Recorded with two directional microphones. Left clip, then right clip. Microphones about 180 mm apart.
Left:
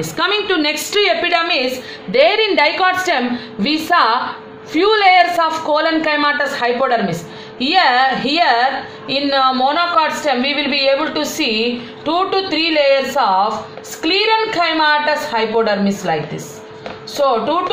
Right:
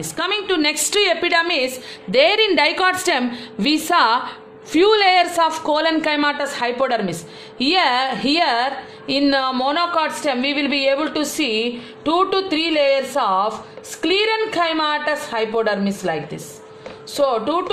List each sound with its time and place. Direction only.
0.0 s a woman's voice: 35° right (ahead or behind); by 17.6 s 65° right (ahead or behind)